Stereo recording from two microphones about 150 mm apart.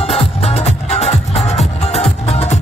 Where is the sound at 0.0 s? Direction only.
40° left (ahead or behind).